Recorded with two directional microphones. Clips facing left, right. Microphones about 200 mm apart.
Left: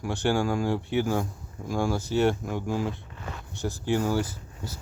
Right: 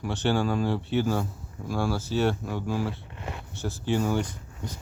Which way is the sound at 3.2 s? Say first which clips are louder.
Right 2 dB; 20° right (ahead or behind).